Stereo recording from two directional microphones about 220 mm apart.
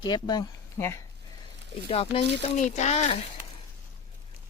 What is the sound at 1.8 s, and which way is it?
Speech, 25° left (ahead or behind).